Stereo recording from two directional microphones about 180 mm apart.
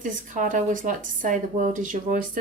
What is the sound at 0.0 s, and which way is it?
Speech, 45° right (ahead or behind).